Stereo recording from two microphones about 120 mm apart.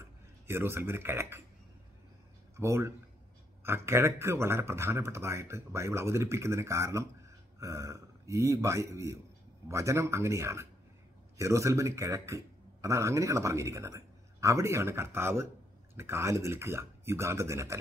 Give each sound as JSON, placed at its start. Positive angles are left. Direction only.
{"t": 0.0, "sound": "speech", "side_deg": -20}
{"t": 2.5, "sound": "a man's voice", "side_deg": -25}